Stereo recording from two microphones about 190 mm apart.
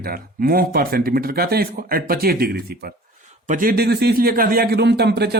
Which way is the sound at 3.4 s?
45° right (ahead or behind).